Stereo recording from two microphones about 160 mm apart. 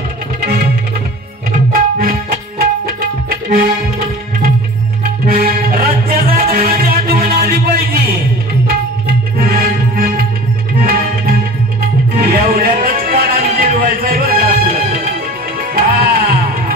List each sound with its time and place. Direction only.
1.7 s music: 65° right (ahead or behind)
5.2 s music: 60° right (ahead or behind)
10.8 s tabla: 65° right (ahead or behind)
12.3 s music: 65° right (ahead or behind)